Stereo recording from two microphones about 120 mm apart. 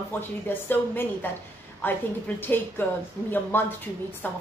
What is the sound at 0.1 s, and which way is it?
A woman's voice, 20° left (ahead or behind).